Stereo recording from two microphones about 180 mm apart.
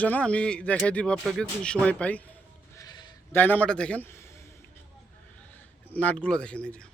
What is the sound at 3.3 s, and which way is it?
Speech, 10° left (ahead or behind).